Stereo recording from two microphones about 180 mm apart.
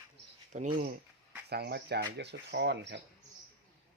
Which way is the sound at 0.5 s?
45° right (ahead or behind).